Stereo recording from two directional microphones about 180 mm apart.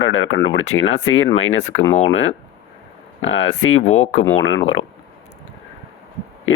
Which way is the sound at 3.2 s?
90° left.